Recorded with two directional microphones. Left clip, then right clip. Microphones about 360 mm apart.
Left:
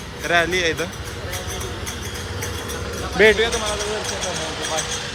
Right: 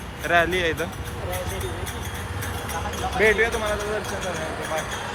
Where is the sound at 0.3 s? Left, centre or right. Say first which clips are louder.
Left 2 dB; centre.